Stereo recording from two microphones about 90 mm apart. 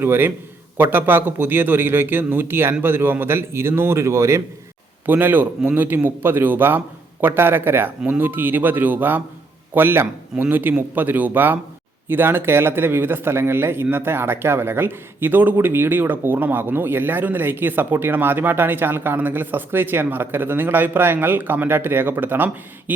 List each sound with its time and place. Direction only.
0.0 s a man's voice: 25° right (ahead or behind)
5.0 s a man's voice: 20° right (ahead or behind)